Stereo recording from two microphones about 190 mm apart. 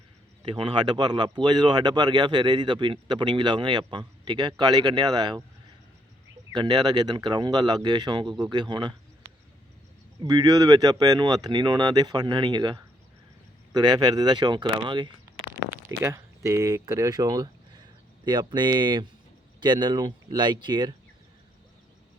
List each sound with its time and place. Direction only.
0.4 s speech: 25° right (ahead or behind)
6.5 s speech: 25° right (ahead or behind)
10.2 s speech: 20° right (ahead or behind)